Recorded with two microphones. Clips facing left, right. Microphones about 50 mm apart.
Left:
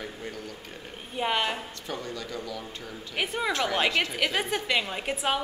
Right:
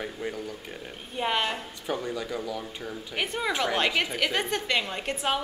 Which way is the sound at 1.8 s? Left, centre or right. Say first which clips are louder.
Right 4 dB; centre.